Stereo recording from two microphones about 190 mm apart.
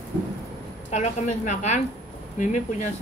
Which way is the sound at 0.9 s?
35° left (ahead or behind).